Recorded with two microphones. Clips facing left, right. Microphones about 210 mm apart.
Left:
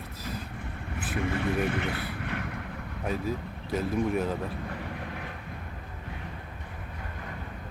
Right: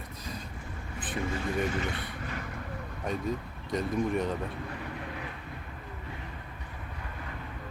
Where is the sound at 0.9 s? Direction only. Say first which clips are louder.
Left 3 dB; 65° left (ahead or behind).